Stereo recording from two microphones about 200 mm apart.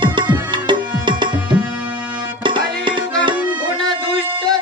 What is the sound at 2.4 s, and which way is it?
Music, 25° right (ahead or behind).